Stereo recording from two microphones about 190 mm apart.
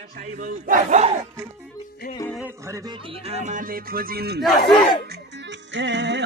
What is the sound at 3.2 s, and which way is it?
Music, 35° right (ahead or behind).